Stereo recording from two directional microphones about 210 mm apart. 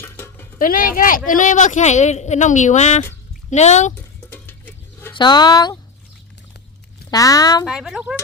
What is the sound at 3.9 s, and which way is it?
Music, 10° left (ahead or behind).